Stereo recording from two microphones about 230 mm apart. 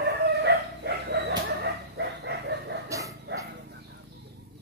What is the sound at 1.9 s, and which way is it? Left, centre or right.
Chicken, right.